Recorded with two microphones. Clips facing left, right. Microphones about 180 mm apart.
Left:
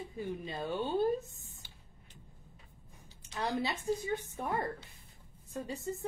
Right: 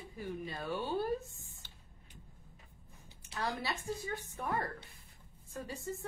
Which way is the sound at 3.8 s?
20° left (ahead or behind).